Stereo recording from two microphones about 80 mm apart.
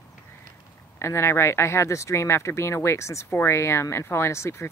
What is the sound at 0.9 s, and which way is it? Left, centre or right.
Speech, left.